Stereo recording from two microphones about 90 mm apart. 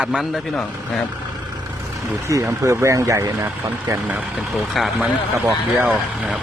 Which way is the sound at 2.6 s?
35° right (ahead or behind).